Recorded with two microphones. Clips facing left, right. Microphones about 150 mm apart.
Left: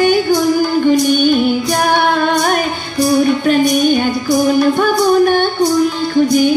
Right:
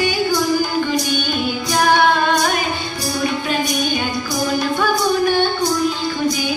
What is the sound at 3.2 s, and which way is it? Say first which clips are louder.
Music: left 6 dB; 50° left (ahead or behind).